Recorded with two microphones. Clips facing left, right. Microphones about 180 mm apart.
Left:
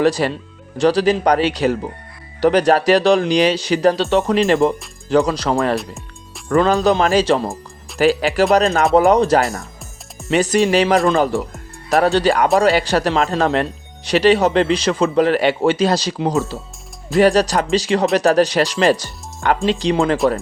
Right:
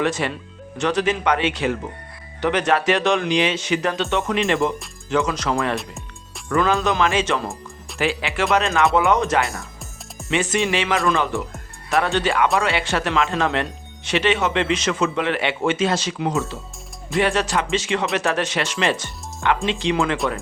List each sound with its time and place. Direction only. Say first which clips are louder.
0.0 s speech: left 6 dB; 35° left (ahead or behind)
5.7 s music: left 5 dB; centre (ahead or behind)
6.5 s speech: left 5 dB; 35° left (ahead or behind)